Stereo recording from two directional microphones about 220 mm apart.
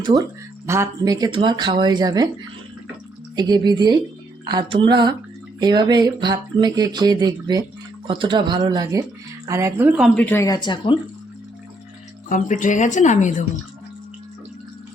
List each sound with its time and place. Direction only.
0.0 s speech: 15° right (ahead or behind)
3.3 s speech: 20° right (ahead or behind)
10.2 s speech: 10° left (ahead or behind)
12.3 s a woman's voice: 35° left (ahead or behind)